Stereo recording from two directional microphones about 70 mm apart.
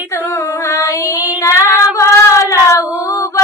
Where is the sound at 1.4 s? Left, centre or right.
Left.